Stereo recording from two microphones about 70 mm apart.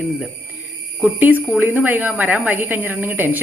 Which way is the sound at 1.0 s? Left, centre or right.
Right.